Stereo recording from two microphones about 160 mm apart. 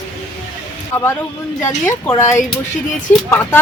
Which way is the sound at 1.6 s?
15° left (ahead or behind).